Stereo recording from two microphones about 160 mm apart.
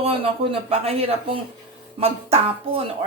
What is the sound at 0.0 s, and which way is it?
Speech, 40° right (ahead or behind).